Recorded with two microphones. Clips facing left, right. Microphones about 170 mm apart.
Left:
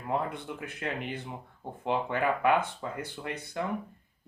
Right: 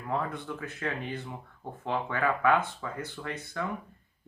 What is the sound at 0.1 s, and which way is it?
Speech, 20° left (ahead or behind).